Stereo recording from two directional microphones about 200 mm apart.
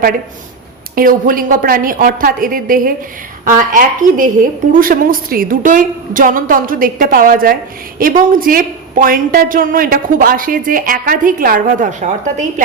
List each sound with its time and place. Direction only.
0.9 s a woman's voice: 45° right (ahead or behind)